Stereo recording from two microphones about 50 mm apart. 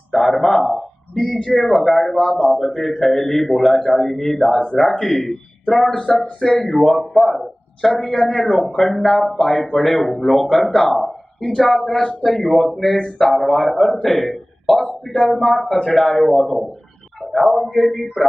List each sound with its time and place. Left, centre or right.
0.1 s a man's voice: centre
14.8 s a sound: centre
15.2 s a man's voice: centre